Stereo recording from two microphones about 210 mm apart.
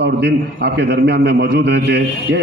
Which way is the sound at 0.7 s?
50° right (ahead or behind).